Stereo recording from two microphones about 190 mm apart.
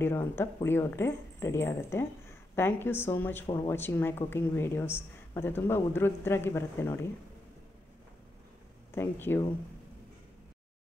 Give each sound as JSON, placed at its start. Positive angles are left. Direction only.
{"t": 0.0, "sound": "speech", "side_deg": 15}
{"t": 3.4, "sound": "speech", "side_deg": 25}
{"t": 3.7, "sound": "speech", "side_deg": 10}
{"t": 8.9, "sound": "speech", "side_deg": 10}